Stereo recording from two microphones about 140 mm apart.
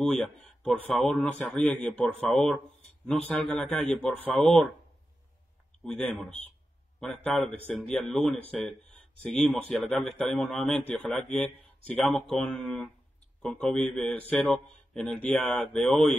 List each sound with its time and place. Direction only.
0.0 s speech: 5° left (ahead or behind)
7.0 s a man's voice: 10° left (ahead or behind)